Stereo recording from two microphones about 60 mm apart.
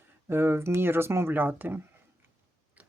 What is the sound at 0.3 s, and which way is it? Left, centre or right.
Speech, right.